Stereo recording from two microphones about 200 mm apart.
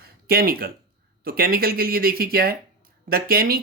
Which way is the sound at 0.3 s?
50° right (ahead or behind).